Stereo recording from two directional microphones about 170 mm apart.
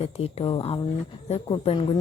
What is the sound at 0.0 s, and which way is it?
A woman's voice, 35° left (ahead or behind).